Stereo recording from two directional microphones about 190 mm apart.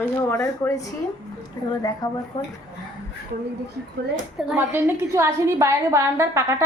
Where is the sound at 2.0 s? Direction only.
20° left (ahead or behind).